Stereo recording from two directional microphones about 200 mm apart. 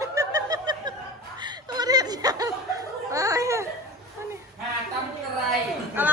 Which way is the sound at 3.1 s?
15° right (ahead or behind).